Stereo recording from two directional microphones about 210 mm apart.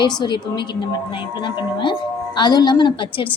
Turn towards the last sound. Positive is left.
turn(degrees=25)  # may be behind; listen again after turning